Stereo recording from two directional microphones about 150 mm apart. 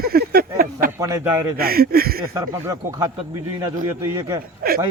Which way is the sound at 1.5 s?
90° right.